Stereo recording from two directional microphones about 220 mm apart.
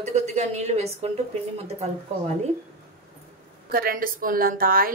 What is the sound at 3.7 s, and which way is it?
Speech, 40° right (ahead or behind).